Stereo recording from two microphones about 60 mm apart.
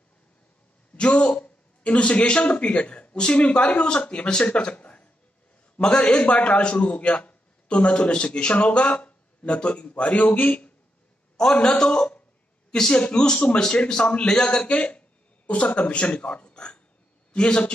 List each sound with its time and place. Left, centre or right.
0.9 s a man's voice: centre